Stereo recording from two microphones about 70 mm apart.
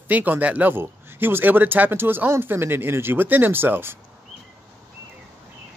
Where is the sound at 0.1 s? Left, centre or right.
Right.